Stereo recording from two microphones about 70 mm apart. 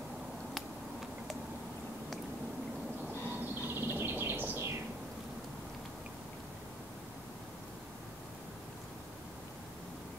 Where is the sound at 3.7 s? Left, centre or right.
Right.